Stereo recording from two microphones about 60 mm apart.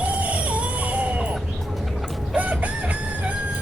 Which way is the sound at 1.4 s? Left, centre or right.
Centre.